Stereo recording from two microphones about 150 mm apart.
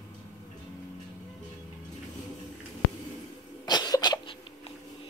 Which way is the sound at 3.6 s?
25° left (ahead or behind).